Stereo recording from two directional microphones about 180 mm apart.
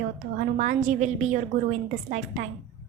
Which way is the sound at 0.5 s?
45° right (ahead or behind).